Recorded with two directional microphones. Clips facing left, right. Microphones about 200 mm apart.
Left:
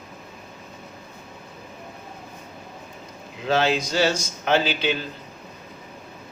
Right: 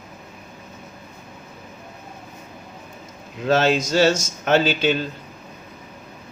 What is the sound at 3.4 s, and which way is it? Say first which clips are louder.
Speech: right 3 dB; 45° right (ahead or behind).